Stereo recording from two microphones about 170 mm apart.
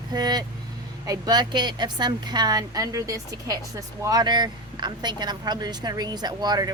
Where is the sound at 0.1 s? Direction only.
25° right (ahead or behind).